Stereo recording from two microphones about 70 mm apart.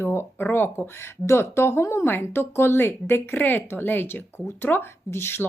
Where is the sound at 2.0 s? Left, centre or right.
Left.